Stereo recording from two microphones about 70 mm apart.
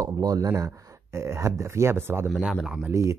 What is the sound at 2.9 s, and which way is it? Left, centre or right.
Speech, right.